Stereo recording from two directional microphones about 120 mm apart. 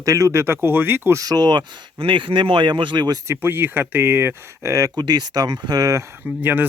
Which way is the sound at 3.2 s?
20° right (ahead or behind).